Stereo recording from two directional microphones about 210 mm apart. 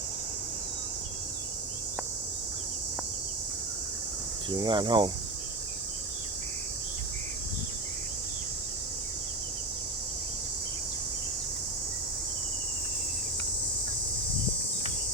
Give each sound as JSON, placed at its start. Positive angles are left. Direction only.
{"t": 4.4, "sound": "speech", "side_deg": -20}